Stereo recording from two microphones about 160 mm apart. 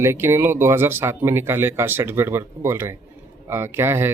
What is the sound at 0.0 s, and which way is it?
Speech, 15° right (ahead or behind).